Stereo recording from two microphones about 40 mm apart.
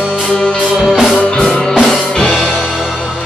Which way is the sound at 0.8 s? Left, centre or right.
Centre.